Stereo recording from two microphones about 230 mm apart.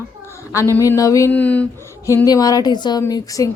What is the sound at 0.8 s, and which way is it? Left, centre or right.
Speech, centre.